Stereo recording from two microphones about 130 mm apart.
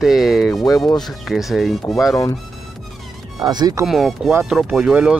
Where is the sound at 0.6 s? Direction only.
25° left (ahead or behind).